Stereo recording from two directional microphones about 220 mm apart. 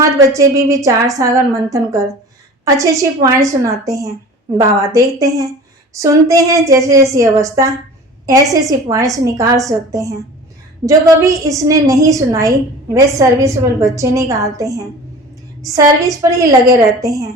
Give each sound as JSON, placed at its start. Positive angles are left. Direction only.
{"t": 0.0, "sound": "a woman's voice", "side_deg": -15}
{"t": 2.6, "sound": "a woman's voice", "side_deg": -15}